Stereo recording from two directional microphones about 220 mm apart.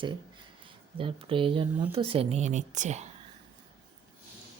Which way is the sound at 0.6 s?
25° right (ahead or behind).